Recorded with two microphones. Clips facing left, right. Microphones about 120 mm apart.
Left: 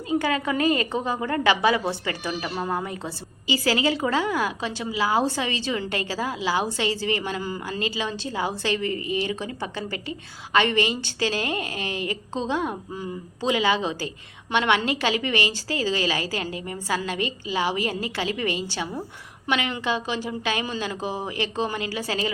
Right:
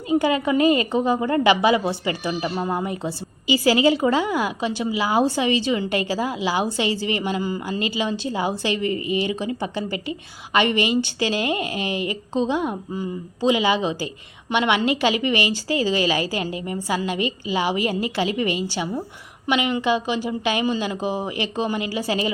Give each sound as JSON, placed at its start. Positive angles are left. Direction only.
{"t": 0.1, "sound": "a woman's voice", "side_deg": -10}